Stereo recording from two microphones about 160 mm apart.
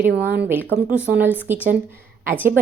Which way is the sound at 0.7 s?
10° right (ahead or behind).